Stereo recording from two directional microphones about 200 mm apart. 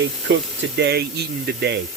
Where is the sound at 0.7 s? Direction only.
55° right (ahead or behind).